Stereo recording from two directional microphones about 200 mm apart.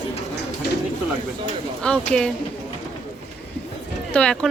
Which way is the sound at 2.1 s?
5° left (ahead or behind).